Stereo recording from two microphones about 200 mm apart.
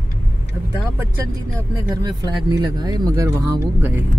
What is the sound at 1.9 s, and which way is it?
Speech, 20° right (ahead or behind).